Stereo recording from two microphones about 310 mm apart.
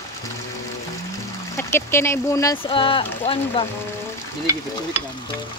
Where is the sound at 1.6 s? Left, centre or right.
Centre.